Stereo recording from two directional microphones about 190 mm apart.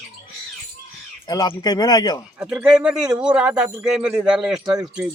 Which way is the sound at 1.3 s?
20° left (ahead or behind).